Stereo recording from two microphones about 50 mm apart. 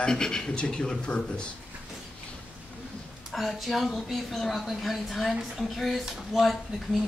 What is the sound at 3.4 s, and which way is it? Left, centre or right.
Speech, centre.